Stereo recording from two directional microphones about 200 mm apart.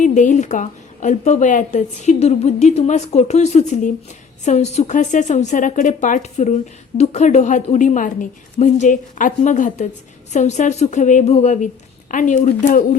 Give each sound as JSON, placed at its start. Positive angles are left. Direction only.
{"t": 0.0, "sound": "speech", "side_deg": 40}